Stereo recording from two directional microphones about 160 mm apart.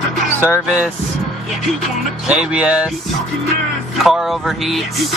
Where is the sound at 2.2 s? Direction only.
5° right (ahead or behind).